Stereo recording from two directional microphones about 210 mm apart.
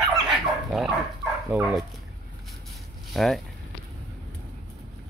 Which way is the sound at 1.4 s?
5° right (ahead or behind).